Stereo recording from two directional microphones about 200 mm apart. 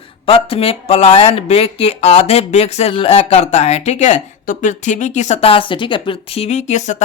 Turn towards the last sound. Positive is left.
turn(degrees=35)  # may be behind; listen again after turning